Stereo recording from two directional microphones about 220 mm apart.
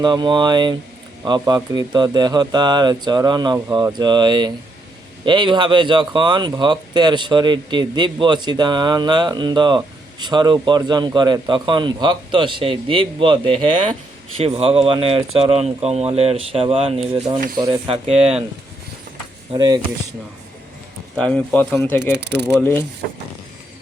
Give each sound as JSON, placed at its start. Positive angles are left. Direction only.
{"t": 0.0, "sound": "speech", "side_deg": -20}
{"t": 19.5, "sound": "speech", "side_deg": -20}
{"t": 21.2, "sound": "speech", "side_deg": 5}
{"t": 22.1, "sound": "speech", "side_deg": -50}
{"t": 22.4, "sound": "speech", "side_deg": 10}